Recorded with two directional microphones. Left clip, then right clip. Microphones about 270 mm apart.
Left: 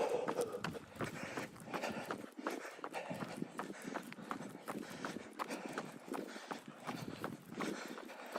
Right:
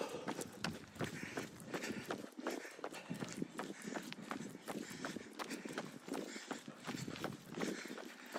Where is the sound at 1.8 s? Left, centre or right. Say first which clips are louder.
Left 3 dB; centre.